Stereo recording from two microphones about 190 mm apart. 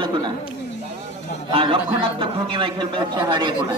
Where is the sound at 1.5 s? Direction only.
25° right (ahead or behind).